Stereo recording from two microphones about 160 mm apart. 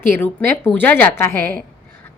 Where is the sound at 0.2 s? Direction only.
15° left (ahead or behind).